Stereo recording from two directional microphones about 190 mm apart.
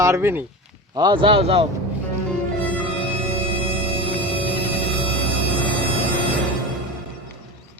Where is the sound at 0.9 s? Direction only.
25° right (ahead or behind).